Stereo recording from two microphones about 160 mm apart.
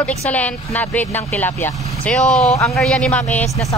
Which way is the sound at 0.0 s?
10° left (ahead or behind).